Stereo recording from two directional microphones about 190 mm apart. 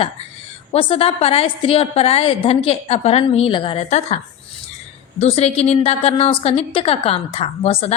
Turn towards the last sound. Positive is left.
turn(degrees=30)  # may be behind; listen again after turning